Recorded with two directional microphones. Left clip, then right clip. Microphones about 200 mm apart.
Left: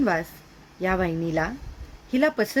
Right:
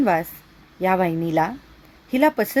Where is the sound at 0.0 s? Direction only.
25° right (ahead or behind).